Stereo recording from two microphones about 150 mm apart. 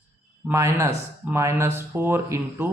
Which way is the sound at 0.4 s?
20° right (ahead or behind).